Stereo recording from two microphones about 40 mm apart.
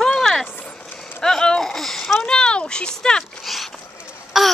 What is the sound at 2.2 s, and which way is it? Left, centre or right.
Speech, left.